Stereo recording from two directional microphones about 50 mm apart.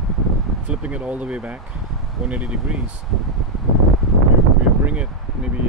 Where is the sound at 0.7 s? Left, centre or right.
Right.